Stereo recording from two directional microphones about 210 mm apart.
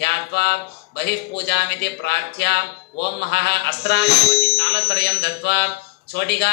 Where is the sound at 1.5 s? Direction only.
55° left (ahead or behind).